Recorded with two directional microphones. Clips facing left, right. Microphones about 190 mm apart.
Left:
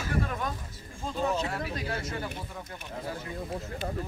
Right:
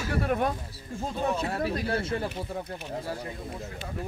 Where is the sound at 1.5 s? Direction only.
30° right (ahead or behind).